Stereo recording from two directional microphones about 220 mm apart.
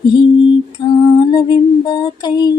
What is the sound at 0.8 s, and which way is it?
Music, 20° left (ahead or behind).